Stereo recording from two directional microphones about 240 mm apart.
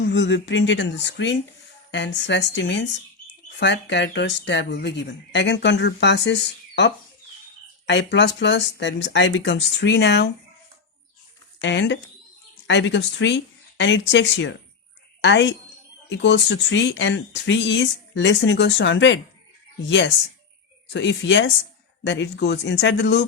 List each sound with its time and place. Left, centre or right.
0.0 s speech: left
7.9 s speech: left
11.6 s speech: left
20.9 s speech: left